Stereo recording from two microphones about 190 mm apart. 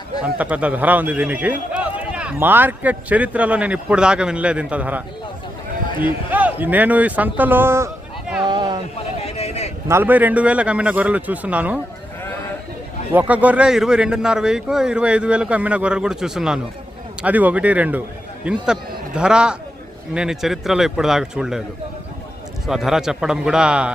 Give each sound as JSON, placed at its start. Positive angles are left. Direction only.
{"t": 0.3, "sound": "a man's voice", "side_deg": -5}
{"t": 8.4, "sound": "a sound", "side_deg": -20}
{"t": 9.2, "sound": "a sound", "side_deg": 35}
{"t": 9.9, "sound": "a man's voice", "side_deg": -10}
{"t": 13.1, "sound": "a man's voice", "side_deg": -10}
{"t": 22.6, "sound": "a man's voice", "side_deg": 0}